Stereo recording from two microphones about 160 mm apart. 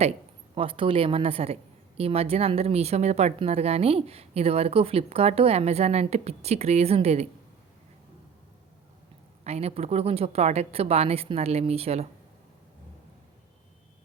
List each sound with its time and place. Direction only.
0.5 s speech: 35° right (ahead or behind)
9.4 s speech: 40° right (ahead or behind)